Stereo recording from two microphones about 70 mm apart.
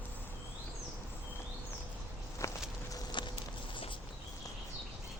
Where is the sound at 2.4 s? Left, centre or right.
Left.